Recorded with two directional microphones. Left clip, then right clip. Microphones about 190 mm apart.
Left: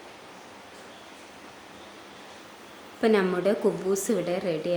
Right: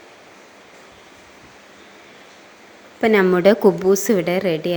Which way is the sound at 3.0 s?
35° right (ahead or behind).